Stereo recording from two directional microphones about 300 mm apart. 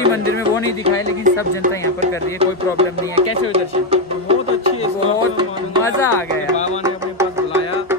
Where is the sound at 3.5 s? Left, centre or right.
Centre.